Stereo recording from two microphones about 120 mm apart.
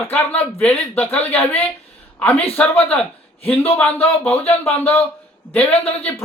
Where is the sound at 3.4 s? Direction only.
55° left (ahead or behind).